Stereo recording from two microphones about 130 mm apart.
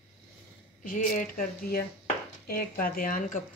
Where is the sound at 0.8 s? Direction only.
90° left.